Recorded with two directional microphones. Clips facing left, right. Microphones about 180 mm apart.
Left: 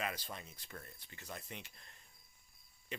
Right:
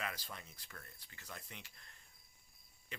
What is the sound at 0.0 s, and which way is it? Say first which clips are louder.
Speech: left 3 dB; 20° left (ahead or behind).